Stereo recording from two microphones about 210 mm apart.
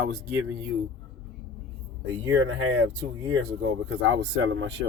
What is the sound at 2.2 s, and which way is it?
Speech, 65° right (ahead or behind).